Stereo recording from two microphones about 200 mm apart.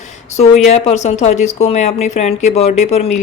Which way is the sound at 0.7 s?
30° left (ahead or behind).